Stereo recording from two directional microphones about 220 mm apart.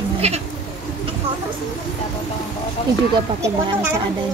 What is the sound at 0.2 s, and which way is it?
Speech, 30° right (ahead or behind).